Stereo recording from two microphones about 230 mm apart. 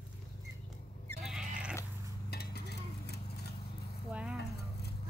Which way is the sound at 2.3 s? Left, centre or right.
Left.